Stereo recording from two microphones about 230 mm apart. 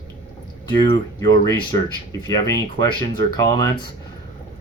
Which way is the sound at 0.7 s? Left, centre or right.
Centre.